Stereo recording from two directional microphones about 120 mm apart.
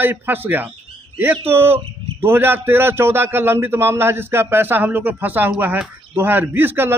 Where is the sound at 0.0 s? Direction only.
15° right (ahead or behind).